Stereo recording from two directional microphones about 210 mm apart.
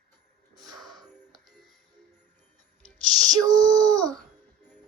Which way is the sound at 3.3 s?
15° right (ahead or behind).